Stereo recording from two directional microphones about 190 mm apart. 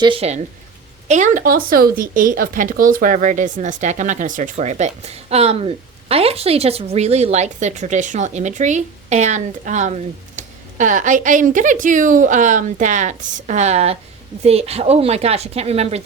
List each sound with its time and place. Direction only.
0.0 s speech: 30° right (ahead or behind)